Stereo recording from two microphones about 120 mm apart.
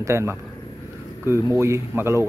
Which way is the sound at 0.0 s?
20° right (ahead or behind).